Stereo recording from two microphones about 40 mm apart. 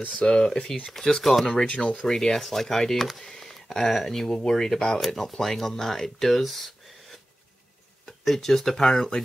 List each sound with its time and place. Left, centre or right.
0.2 s speech: centre
0.9 s speech: centre
1.7 s speech: left
2.0 s speech: centre
5.0 s speech: centre
8.2 s speech: centre